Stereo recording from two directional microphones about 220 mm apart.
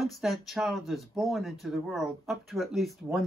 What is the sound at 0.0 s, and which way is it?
Speech, centre (ahead or behind).